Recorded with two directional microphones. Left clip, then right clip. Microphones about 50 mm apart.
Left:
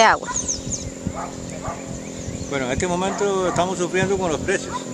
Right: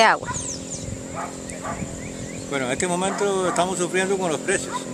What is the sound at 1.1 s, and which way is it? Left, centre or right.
Dog, left.